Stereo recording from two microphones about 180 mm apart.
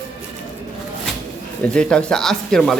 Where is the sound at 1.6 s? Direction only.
5° left (ahead or behind).